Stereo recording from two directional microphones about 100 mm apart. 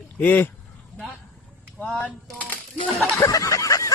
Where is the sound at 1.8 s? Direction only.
10° left (ahead or behind).